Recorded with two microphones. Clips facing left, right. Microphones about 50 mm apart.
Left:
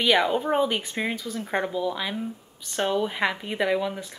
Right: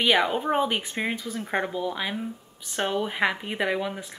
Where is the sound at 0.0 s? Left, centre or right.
Centre.